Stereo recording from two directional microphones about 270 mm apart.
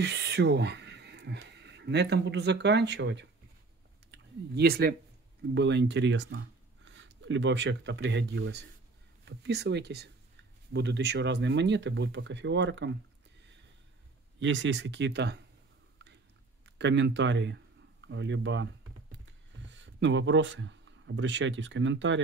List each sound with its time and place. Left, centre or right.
0.0 s speech: right
4.6 s speech: right
14.4 s speech: right
16.6 s speech: right
19.1 s a sound: right